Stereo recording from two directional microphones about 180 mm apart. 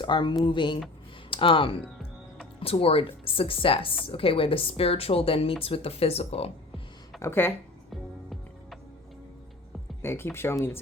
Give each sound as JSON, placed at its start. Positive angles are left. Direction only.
{"t": 0.0, "sound": "speech", "side_deg": 25}
{"t": 7.2, "sound": "speech", "side_deg": 10}
{"t": 7.9, "sound": "music", "side_deg": 0}
{"t": 10.0, "sound": "speech", "side_deg": 15}